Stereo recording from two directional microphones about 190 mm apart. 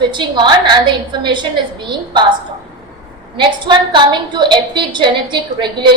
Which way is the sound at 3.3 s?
25° right (ahead or behind).